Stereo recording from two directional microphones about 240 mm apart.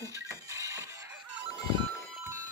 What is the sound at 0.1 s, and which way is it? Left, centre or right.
Music, centre.